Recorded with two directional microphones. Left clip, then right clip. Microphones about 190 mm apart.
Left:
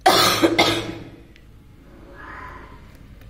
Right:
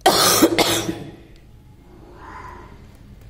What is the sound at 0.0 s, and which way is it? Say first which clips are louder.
Cough: right 1 dB; 60° right (ahead or behind).